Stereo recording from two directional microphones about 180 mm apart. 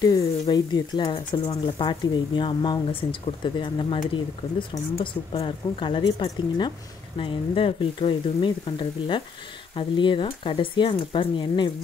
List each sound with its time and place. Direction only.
0.0 s speech: 20° left (ahead or behind)